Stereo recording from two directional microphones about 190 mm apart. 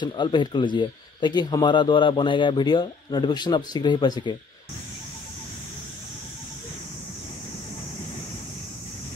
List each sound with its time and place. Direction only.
0.0 s speech: 25° left (ahead or behind)